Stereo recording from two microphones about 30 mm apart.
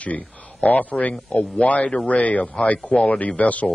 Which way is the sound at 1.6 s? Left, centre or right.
Left.